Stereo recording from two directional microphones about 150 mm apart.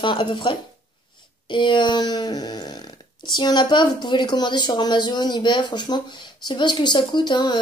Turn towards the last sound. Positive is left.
turn(degrees=30)  # may be behind; listen again after turning